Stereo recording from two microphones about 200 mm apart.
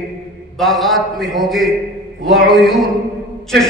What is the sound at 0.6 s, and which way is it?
A man's voice, centre (ahead or behind).